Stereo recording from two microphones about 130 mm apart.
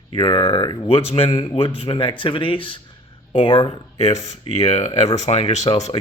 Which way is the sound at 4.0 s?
60° left (ahead or behind).